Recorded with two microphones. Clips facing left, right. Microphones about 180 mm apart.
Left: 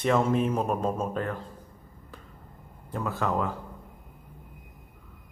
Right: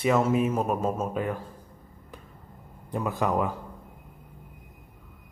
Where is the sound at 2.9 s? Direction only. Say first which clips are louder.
Right 2 dB; 15° right (ahead or behind).